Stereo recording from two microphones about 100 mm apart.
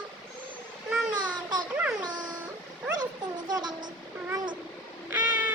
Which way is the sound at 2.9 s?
40° right (ahead or behind).